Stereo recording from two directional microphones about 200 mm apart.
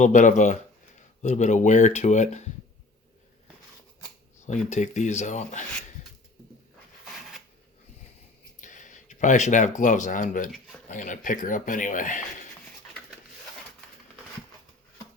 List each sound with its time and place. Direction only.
0.0 s speech: 40° left (ahead or behind)
4.4 s speech: 35° left (ahead or behind)
8.6 s speech: 40° left (ahead or behind)